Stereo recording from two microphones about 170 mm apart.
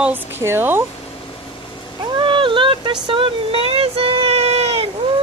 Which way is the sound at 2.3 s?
30° right (ahead or behind).